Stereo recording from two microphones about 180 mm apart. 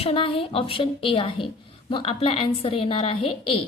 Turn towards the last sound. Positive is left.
turn(degrees=30)  # may be behind; listen again after turning